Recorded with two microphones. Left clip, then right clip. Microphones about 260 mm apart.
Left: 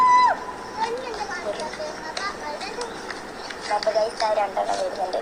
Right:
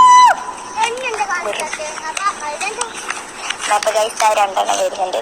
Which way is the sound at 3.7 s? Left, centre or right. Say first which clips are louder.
Right 6 dB; right.